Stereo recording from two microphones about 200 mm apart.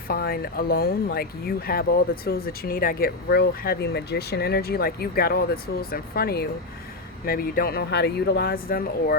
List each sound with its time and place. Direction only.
0.1 s speech: 50° left (ahead or behind)